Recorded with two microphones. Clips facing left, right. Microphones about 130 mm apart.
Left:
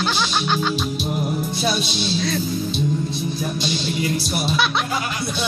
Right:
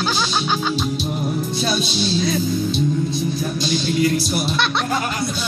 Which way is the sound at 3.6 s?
15° left (ahead or behind).